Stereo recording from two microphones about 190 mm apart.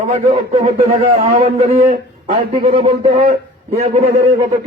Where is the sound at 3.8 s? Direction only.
35° right (ahead or behind).